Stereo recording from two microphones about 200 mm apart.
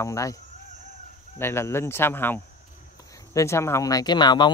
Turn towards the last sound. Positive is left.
turn(degrees=20)  # may be behind; listen again after turning